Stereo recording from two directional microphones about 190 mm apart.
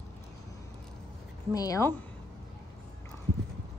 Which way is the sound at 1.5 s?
20° left (ahead or behind).